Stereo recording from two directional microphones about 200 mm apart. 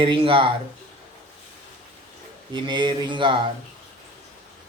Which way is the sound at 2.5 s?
25° right (ahead or behind).